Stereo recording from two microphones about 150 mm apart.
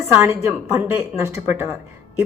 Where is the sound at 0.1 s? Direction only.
15° right (ahead or behind).